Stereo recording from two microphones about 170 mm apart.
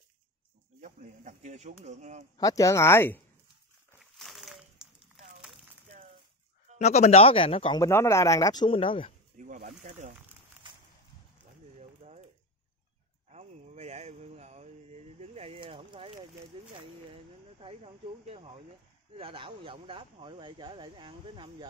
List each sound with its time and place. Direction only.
0.7 s speech: 45° right (ahead or behind)
2.3 s speech: 20° left (ahead or behind)
4.2 s a sound: centre (ahead or behind)
6.8 s speech: 40° left (ahead or behind)
7.8 s speech: 15° left (ahead or behind); by 9.1 s 30° left (ahead or behind)
9.7 s speech: 45° right (ahead or behind)
12.0 s a sound: 45° right (ahead or behind)
13.3 s a sound: 40° right (ahead or behind)
19.1 s speech: 30° right (ahead or behind)